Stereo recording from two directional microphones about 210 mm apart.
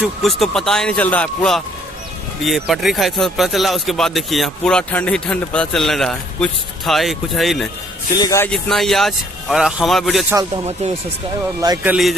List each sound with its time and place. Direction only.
0.0 s speech: centre (ahead or behind)
8.2 s speech: 15° left (ahead or behind)
8.5 s speech: centre (ahead or behind)
10.3 s speech: 25° right (ahead or behind)
11.6 s speech: 20° right (ahead or behind)